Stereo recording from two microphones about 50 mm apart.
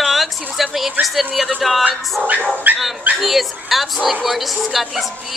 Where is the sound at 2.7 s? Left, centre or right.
Right.